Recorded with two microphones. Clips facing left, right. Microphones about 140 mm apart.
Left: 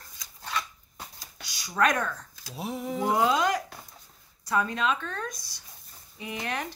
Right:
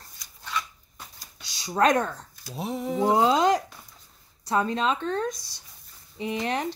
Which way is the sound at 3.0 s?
30° right (ahead or behind).